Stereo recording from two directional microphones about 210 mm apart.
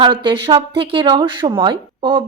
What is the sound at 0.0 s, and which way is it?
A woman's voice, 25° right (ahead or behind).